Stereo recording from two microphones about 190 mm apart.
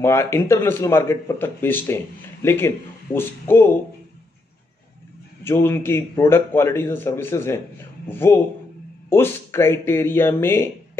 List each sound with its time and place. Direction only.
0.0 s a man's voice: 15° left (ahead or behind)
5.4 s a man's voice: 15° left (ahead or behind)